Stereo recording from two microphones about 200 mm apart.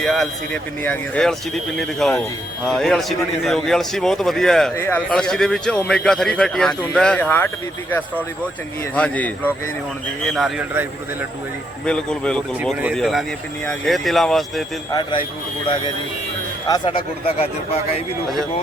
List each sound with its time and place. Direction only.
0.0 s a man's voice: centre (ahead or behind)
11.9 s a man's voice: 5° left (ahead or behind)
15.6 s speech: 25° left (ahead or behind)